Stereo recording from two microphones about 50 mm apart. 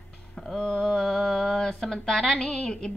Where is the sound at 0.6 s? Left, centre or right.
Centre.